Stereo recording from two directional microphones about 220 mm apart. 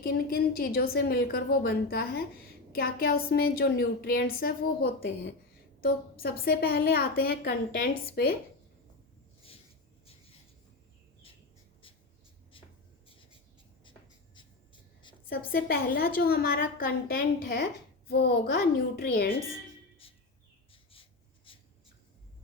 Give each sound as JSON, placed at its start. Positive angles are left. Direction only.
{"t": 0.0, "sound": "a woman's voice", "side_deg": 45}
{"t": 12.5, "sound": "writing", "side_deg": 25}
{"t": 13.1, "sound": "a sound", "side_deg": 25}
{"t": 15.3, "sound": "a woman's voice", "side_deg": 40}
{"t": 20.9, "sound": "writing", "side_deg": 25}